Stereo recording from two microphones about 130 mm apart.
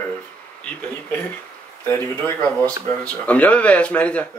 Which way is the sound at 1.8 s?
15° left (ahead or behind).